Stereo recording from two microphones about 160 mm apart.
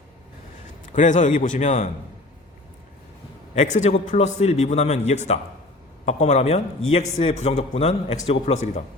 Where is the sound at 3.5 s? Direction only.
50° left (ahead or behind).